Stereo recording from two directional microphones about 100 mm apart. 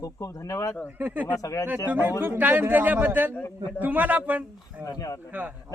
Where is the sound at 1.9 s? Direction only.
20° right (ahead or behind).